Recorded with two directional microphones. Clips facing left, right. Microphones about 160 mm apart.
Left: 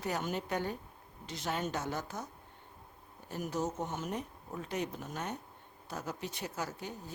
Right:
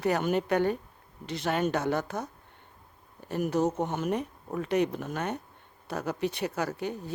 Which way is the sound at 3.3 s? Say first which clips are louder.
Right 9 dB; 65° right (ahead or behind).